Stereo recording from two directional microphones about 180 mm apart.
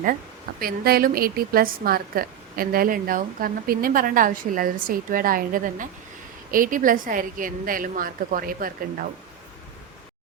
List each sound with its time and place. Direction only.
0.6 s a woman's voice: 55° right (ahead or behind)